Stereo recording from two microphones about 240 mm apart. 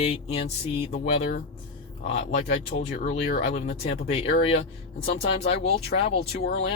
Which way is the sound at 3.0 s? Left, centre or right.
Left.